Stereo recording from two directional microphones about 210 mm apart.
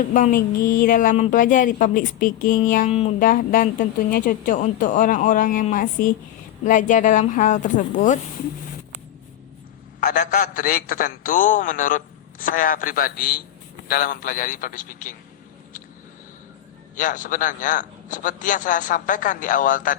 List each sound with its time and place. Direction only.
0.1 s a man's voice: 40° left (ahead or behind)
10.0 s a man's voice: 35° left (ahead or behind)
16.9 s a man's voice: 40° left (ahead or behind)